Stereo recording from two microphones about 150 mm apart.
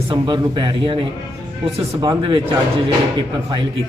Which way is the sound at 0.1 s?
30° right (ahead or behind).